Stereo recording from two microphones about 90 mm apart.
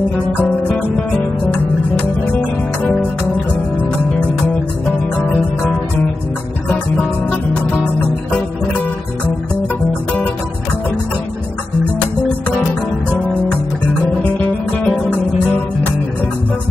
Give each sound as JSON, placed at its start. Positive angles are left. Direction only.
{"t": 2.8, "sound": "music", "side_deg": 20}
{"t": 5.2, "sound": "music", "side_deg": 15}
{"t": 14.9, "sound": "music", "side_deg": 15}